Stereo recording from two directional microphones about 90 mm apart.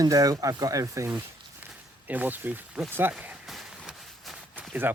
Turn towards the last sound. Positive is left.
turn(degrees=-20)  # may be behind; listen again after turning